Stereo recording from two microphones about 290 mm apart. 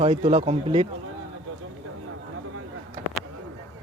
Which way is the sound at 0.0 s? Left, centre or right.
Centre.